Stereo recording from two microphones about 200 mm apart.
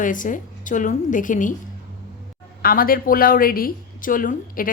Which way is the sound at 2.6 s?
45° left (ahead or behind).